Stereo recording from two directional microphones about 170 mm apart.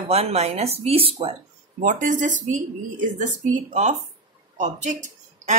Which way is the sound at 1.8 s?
50° right (ahead or behind).